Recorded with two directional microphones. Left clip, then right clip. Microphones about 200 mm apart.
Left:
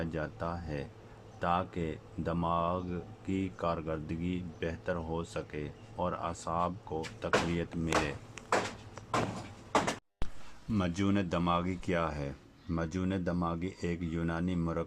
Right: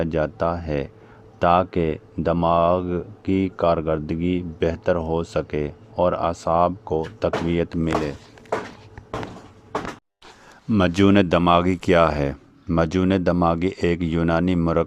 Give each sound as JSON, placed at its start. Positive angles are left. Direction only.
{"t": 0.0, "sound": "speech", "side_deg": -40}
{"t": 10.7, "sound": "speech", "side_deg": -45}